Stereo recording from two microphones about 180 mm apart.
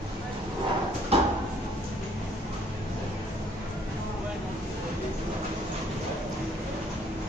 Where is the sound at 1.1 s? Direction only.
35° right (ahead or behind).